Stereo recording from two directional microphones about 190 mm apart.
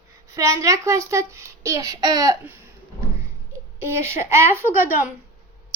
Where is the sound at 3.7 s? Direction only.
10° right (ahead or behind).